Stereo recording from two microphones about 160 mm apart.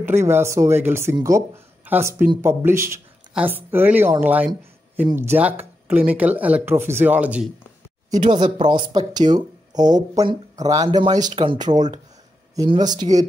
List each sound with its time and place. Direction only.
0.0 s speech: 15° right (ahead or behind)
8.1 s speech: 30° right (ahead or behind)